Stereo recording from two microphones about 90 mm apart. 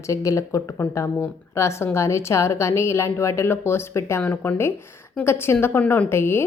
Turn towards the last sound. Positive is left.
turn(degrees=25)  # may be behind; listen again after turning